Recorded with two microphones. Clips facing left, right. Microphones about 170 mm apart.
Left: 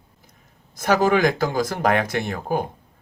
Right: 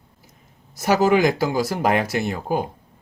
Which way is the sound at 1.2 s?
50° left (ahead or behind).